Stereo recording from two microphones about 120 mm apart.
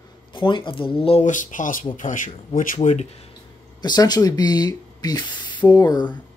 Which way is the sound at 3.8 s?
35° left (ahead or behind).